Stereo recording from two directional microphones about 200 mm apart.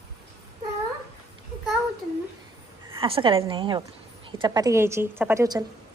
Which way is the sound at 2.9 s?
25° right (ahead or behind).